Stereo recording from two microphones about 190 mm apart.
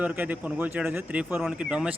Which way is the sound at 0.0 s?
10° right (ahead or behind).